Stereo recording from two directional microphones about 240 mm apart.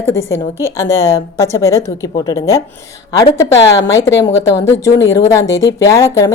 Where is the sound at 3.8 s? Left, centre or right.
Left.